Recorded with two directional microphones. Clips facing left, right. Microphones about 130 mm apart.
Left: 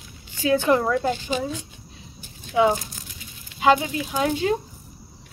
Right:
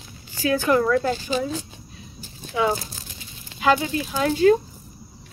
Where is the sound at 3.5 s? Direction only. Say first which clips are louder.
Left 2 dB; 20° left (ahead or behind).